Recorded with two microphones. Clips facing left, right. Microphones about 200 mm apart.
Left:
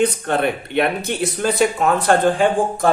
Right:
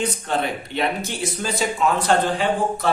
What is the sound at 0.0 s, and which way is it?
Speech, 60° left (ahead or behind).